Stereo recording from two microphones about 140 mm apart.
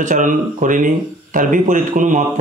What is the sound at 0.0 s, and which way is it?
A man's voice, 65° right (ahead or behind).